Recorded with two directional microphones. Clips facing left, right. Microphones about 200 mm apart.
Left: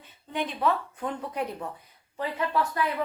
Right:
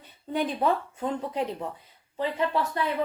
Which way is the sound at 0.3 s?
35° right (ahead or behind).